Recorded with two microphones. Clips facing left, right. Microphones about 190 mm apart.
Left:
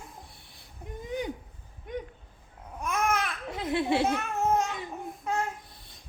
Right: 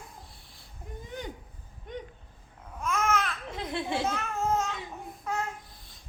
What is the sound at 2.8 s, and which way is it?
Babbling, 15° left (ahead or behind).